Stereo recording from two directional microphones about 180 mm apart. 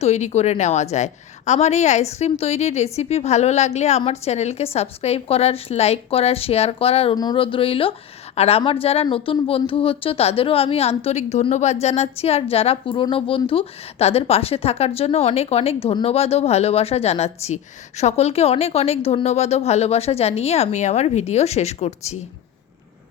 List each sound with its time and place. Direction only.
0.0 s a woman's voice: 35° left (ahead or behind)